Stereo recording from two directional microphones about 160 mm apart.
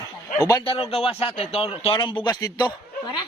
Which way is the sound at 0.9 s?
35° left (ahead or behind).